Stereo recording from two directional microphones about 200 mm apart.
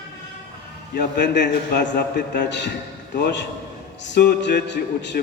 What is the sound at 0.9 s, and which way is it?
Speech, 60° left (ahead or behind).